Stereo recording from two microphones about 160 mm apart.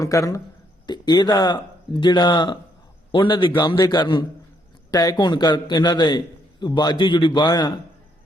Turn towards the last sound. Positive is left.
turn(degrees=25)  # may be behind; listen again after turning